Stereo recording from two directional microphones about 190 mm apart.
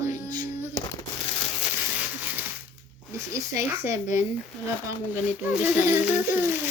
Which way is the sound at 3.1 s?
15° right (ahead or behind).